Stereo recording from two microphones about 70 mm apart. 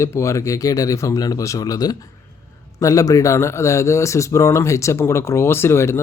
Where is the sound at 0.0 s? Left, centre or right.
Left.